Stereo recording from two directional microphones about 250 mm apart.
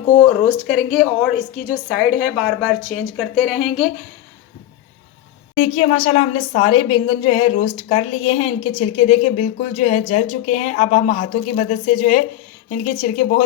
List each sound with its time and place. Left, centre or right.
0.7 s a woman's voice: centre
5.5 s a woman's voice: left